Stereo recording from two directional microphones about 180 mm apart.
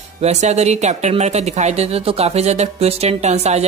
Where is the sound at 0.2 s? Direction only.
40° right (ahead or behind).